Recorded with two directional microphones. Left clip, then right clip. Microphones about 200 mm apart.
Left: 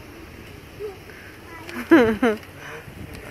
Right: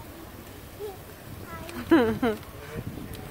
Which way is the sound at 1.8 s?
15° left (ahead or behind).